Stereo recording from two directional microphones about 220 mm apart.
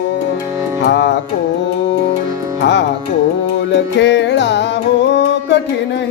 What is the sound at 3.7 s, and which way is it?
Music, 55° left (ahead or behind).